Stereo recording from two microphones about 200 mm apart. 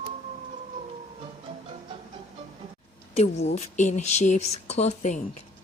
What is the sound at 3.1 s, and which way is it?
Speech, 35° left (ahead or behind).